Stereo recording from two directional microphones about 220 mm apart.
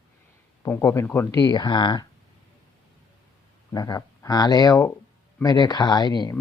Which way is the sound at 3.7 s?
15° left (ahead or behind).